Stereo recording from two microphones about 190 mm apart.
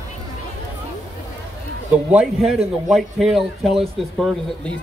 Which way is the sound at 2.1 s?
Centre (ahead or behind).